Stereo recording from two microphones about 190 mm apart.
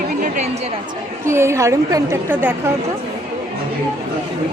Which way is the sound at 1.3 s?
15° right (ahead or behind).